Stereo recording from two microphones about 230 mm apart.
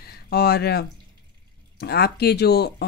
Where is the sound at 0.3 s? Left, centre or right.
Left.